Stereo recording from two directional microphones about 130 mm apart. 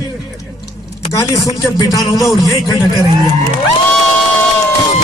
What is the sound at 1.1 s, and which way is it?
Speech, 25° left (ahead or behind).